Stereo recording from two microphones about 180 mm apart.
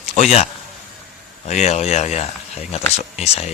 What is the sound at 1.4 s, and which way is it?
Speech, 40° left (ahead or behind).